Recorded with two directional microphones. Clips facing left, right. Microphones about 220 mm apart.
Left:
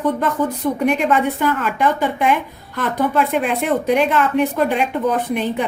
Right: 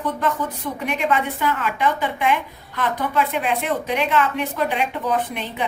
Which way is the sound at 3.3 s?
45° left (ahead or behind).